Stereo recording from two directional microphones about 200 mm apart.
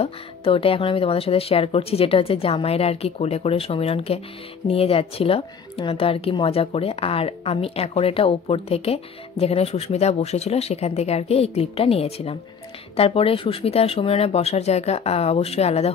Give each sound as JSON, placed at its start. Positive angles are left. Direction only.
{"t": 0.0, "sound": "a woman's voice", "side_deg": 30}